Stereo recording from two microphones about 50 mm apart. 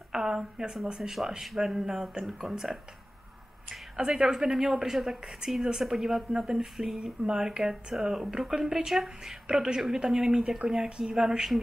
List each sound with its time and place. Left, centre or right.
0.1 s speech: centre
9.5 s a woman's voice: centre